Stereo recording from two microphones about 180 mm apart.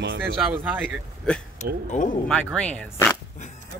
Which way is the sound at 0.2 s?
5° right (ahead or behind).